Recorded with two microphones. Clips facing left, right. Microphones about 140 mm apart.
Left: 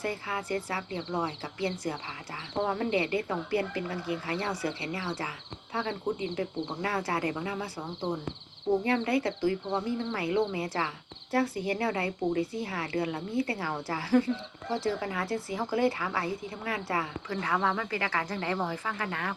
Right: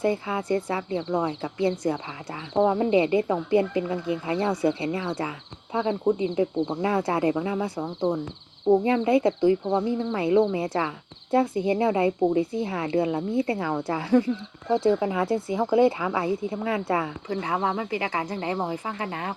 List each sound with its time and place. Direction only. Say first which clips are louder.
0.0 s a woman's voice: right 8 dB; 20° right (ahead or behind)